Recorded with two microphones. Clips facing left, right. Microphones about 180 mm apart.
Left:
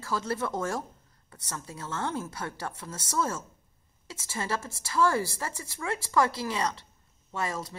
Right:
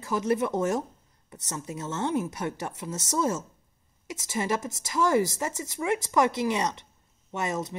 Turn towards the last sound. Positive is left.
turn(degrees=-20)  # may be behind; listen again after turning